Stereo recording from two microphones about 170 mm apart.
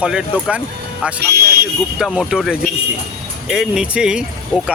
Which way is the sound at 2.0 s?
5° right (ahead or behind).